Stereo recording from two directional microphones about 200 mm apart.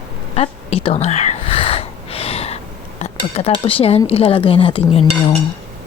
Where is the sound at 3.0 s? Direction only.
30° left (ahead or behind).